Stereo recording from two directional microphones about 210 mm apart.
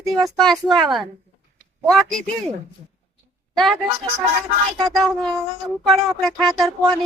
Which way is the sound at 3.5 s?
Centre (ahead or behind).